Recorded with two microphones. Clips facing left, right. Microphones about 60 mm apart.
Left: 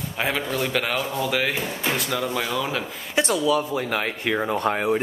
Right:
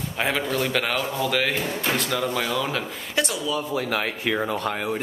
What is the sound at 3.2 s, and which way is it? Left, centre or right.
Speech, centre.